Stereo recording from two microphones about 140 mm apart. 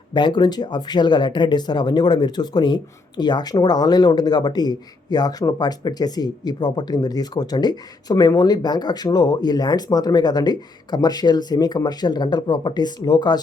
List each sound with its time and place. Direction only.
0.1 s speech: 30° left (ahead or behind)